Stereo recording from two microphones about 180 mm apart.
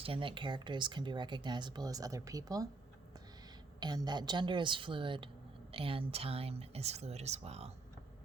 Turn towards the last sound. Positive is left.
turn(degrees=-35)  # may be behind; listen again after turning